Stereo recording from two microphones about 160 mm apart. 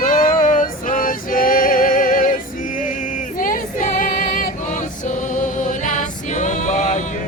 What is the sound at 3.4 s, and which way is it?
Female singing, 55° left (ahead or behind).